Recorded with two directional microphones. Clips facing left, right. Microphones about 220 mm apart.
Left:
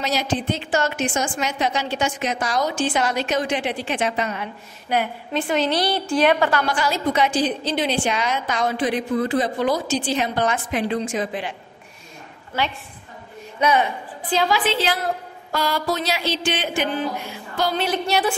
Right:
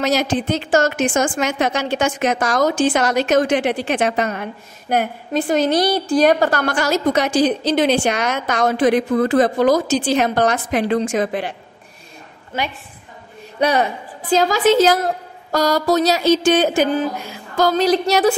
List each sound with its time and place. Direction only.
0.0 s a woman's voice: 45° right (ahead or behind)
8.1 s a woman's voice: 75° right (ahead or behind)
8.6 s a woman's voice: 45° right (ahead or behind)
10.2 s a sound: 40° right (ahead or behind)
10.7 s a woman's voice: 70° right (ahead or behind)
13.6 s a woman's voice: 35° right (ahead or behind)
15.5 s a sound: 40° right (ahead or behind)